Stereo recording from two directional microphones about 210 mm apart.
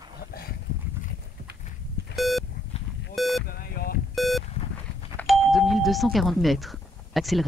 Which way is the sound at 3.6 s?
45° left (ahead or behind).